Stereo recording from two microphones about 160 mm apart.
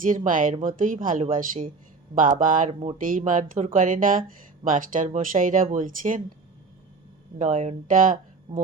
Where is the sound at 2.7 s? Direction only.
40° right (ahead or behind).